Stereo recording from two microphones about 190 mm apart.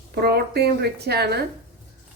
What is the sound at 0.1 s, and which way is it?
A woman's voice, 55° right (ahead or behind).